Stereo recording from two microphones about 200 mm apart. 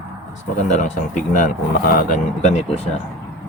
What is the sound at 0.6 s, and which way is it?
Speech, 35° left (ahead or behind).